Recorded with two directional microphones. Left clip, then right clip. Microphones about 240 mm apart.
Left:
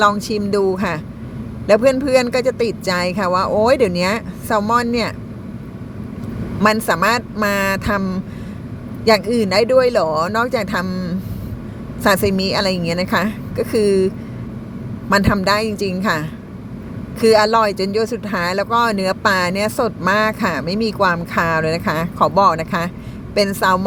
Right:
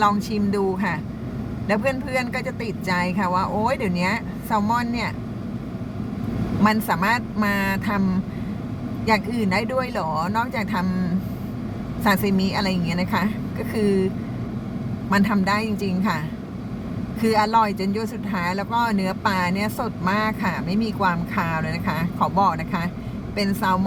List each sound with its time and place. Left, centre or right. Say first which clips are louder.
0.0 s speech: left 5 dB; left
6.6 s speech: left 6 dB; left
12.0 s a woman's voice: left 6 dB; left
15.1 s a woman's voice: left 6 dB; left